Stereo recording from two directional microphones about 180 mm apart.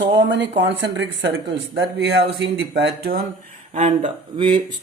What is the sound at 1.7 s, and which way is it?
Speech, 70° right (ahead or behind).